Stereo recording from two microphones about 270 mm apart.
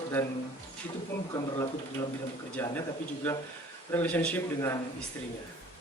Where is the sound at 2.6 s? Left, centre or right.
Centre.